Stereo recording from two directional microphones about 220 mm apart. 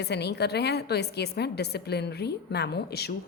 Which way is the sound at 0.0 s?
50° left (ahead or behind).